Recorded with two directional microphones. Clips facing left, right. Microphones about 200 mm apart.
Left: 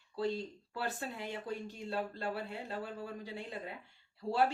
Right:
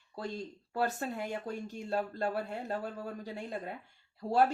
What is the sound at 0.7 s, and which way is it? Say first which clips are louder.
Speech: right 7 dB; 45° right (ahead or behind).